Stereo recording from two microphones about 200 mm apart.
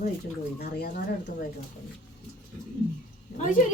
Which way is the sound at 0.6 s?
55° left (ahead or behind).